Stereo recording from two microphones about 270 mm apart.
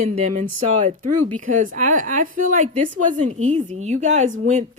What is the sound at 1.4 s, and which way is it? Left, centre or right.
Speech, right.